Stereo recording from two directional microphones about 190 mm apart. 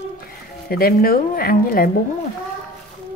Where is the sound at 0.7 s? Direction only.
50° left (ahead or behind).